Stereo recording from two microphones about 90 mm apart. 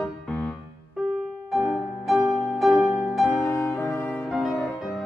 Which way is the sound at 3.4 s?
25° left (ahead or behind).